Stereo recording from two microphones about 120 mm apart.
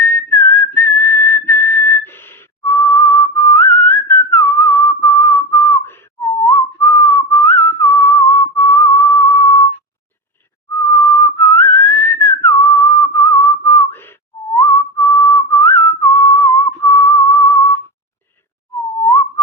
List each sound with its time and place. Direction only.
0.0 s whistling: 15° left (ahead or behind)
10.7 s whistling: 25° left (ahead or behind)